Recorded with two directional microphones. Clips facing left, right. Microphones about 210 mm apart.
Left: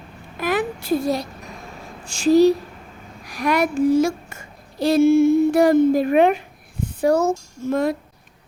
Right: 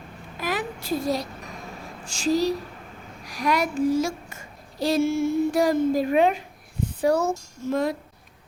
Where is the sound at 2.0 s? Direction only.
60° left (ahead or behind).